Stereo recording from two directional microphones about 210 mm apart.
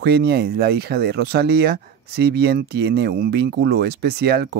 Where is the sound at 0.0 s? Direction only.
50° right (ahead or behind).